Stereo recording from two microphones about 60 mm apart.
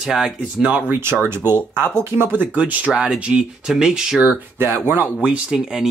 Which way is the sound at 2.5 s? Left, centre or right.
Right.